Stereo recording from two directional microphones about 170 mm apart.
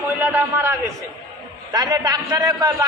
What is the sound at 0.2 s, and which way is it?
Speech, 10° right (ahead or behind).